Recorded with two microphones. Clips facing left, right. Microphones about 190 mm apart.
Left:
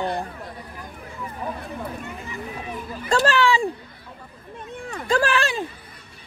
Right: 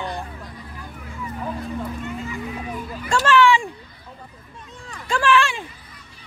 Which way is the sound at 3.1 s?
35° left (ahead or behind).